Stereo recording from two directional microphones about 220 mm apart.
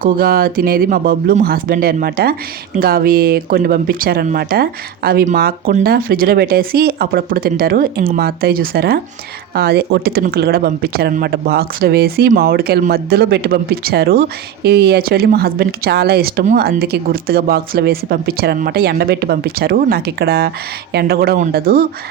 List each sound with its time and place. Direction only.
0.0 s speech: 40° right (ahead or behind)